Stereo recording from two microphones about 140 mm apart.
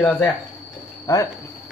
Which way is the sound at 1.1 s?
25° left (ahead or behind).